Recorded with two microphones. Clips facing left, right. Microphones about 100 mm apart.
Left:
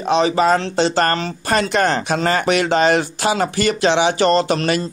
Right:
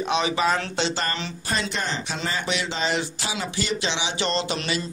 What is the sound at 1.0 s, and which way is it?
Speech, 60° left (ahead or behind).